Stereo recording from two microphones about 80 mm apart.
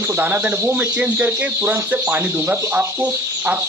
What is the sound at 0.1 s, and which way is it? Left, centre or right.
Speech, right.